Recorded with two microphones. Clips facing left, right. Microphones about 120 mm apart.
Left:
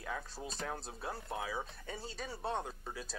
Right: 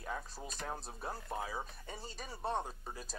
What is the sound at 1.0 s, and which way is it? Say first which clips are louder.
Speech: even; 5° left (ahead or behind).